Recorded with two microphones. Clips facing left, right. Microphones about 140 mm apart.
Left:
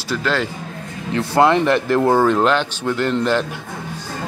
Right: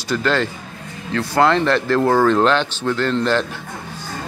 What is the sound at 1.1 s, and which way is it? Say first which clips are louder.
Speech: left 1 dB; 20° left (ahead or behind).